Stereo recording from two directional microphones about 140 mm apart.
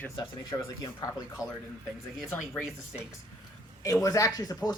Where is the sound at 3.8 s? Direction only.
25° left (ahead or behind).